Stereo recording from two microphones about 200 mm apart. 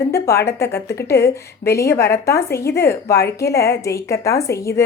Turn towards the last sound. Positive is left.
turn(degrees=15)  # may be behind; listen again after turning